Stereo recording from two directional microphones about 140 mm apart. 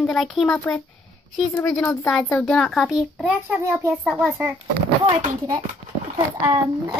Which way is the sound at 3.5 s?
15° right (ahead or behind).